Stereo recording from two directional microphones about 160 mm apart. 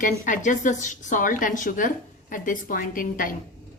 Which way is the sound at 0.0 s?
55° left (ahead or behind).